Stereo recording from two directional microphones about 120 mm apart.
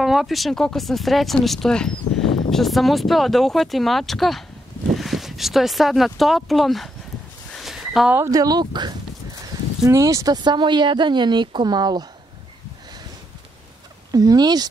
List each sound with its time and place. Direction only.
0.0 s speech: centre (ahead or behind)
7.5 s a sound: centre (ahead or behind)
8.3 s speech: 30° right (ahead or behind)
14.1 s speech: 30° right (ahead or behind)